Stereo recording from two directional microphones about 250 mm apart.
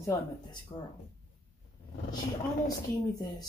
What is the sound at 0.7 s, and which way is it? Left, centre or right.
Speech, centre.